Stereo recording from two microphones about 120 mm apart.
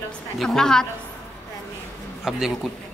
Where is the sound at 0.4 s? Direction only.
5° left (ahead or behind).